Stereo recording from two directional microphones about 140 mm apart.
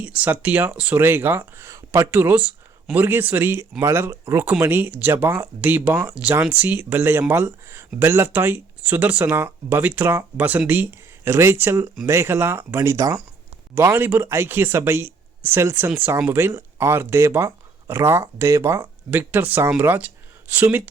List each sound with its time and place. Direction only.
0.0 s speech: 10° right (ahead or behind)